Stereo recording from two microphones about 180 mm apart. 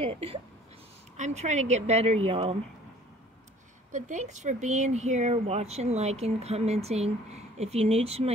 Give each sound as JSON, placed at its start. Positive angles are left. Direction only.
{"t": 0.0, "sound": "speech", "side_deg": -35}
{"t": 3.9, "sound": "speech", "side_deg": -40}